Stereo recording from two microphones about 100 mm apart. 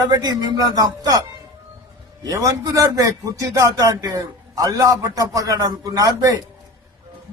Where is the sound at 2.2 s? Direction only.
35° right (ahead or behind).